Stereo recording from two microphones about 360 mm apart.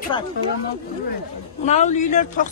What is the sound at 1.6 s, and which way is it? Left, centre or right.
Speech, centre.